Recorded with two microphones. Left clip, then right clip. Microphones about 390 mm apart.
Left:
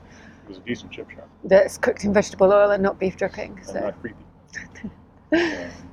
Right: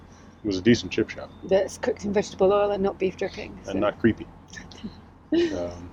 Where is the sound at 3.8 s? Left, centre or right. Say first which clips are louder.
Right 8 dB; right.